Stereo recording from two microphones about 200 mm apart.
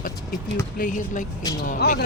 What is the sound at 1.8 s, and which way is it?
Speech, 55° left (ahead or behind).